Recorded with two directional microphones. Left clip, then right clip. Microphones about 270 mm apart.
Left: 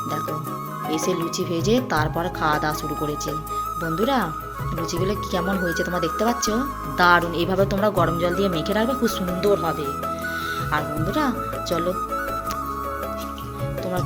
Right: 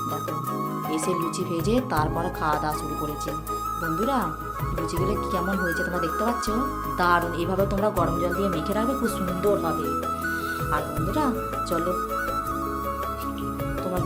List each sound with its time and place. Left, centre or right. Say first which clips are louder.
1.6 s speech: left 3 dB; centre
3.9 s speech: left 5 dB; centre